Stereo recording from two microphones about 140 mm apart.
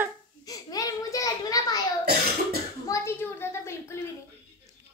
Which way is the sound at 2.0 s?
90° right.